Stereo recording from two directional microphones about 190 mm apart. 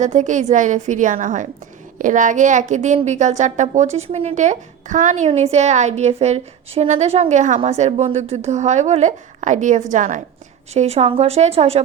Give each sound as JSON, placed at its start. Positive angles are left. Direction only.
{"t": 0.0, "sound": "a woman's voice", "side_deg": -40}